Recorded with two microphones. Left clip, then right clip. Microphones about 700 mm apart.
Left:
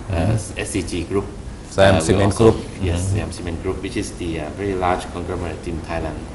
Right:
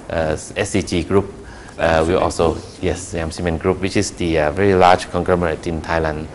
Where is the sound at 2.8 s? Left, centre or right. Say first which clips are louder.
Right 4 dB; right.